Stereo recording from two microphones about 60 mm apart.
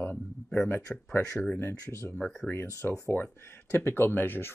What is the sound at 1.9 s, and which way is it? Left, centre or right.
Speech, left.